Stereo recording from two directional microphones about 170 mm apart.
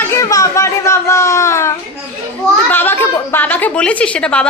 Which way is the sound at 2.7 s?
10° left (ahead or behind).